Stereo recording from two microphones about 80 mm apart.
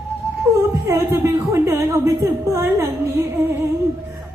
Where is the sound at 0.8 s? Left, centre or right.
Right.